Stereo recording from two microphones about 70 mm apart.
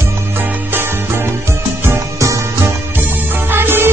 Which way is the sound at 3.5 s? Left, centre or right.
Right.